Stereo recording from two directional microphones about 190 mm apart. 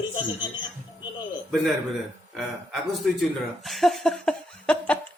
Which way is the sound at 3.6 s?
Centre (ahead or behind).